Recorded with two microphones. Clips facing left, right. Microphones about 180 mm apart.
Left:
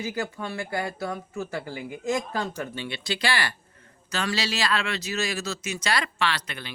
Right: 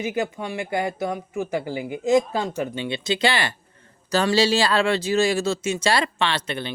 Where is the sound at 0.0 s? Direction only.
20° right (ahead or behind).